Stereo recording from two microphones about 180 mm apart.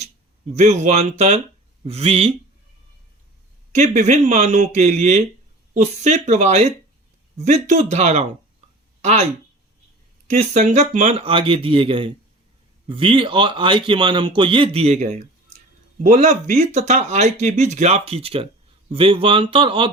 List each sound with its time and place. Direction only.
0.5 s speech: 40° right (ahead or behind)
3.7 s a man's voice: 40° right (ahead or behind)